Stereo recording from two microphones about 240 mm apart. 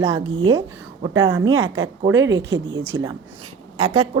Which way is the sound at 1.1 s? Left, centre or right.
Right.